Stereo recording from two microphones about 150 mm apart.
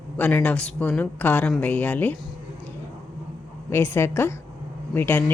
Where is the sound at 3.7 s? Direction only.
15° left (ahead or behind).